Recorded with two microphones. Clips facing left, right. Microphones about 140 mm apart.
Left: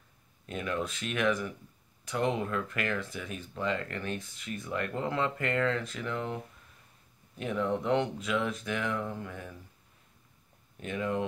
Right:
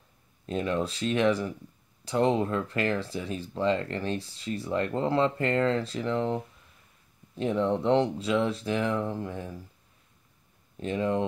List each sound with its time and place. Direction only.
0.5 s speech: 30° right (ahead or behind)
10.8 s speech: 30° right (ahead or behind)